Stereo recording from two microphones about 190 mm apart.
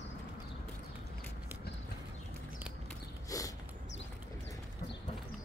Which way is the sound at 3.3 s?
20° left (ahead or behind).